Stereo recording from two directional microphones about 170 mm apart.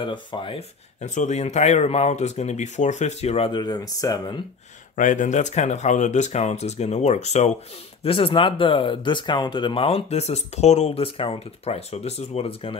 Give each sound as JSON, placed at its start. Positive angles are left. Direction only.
{"t": 0.0, "sound": "speech", "side_deg": 30}
{"t": 4.9, "sound": "speech", "side_deg": 50}